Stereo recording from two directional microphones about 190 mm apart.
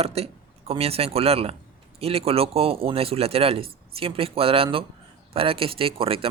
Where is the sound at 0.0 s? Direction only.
30° right (ahead or behind).